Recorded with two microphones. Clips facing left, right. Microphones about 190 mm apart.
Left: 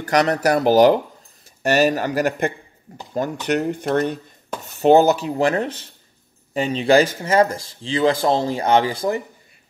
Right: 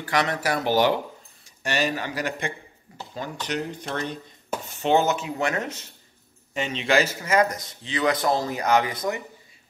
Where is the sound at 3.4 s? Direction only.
55° left (ahead or behind).